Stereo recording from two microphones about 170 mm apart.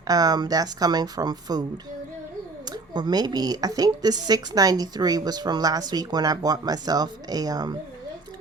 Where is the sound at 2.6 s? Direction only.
25° right (ahead or behind).